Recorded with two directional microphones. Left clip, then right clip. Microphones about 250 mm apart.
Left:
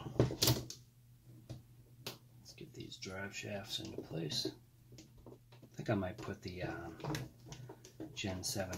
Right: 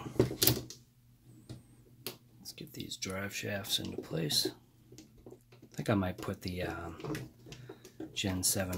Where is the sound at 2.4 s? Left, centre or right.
Right.